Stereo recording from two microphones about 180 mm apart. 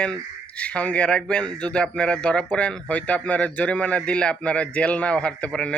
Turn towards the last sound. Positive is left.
turn(degrees=5)  # may be behind; listen again after turning